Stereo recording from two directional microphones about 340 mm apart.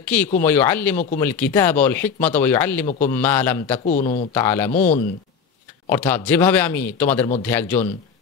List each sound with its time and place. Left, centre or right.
0.4 s speech: centre
3.8 s speech: left
4.4 s speech: centre
4.7 s speech: left
5.9 s speech: centre